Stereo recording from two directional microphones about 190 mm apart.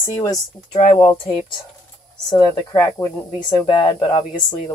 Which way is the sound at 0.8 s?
35° left (ahead or behind).